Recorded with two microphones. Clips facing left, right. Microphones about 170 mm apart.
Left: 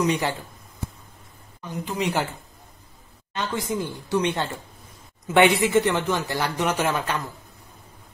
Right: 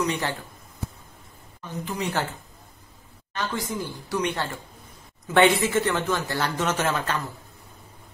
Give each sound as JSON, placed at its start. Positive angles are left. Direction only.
{"t": 0.0, "sound": "speech", "side_deg": 15}
{"t": 2.0, "sound": "speech", "side_deg": 15}
{"t": 3.3, "sound": "speech", "side_deg": 20}